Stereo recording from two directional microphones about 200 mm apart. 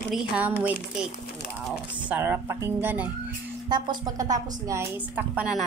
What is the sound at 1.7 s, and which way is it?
Speech, 10° right (ahead or behind).